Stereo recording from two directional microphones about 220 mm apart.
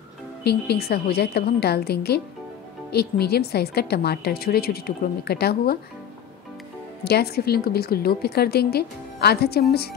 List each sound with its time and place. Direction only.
0.4 s a woman's voice: 50° left (ahead or behind)
7.1 s a woman's voice: 45° left (ahead or behind)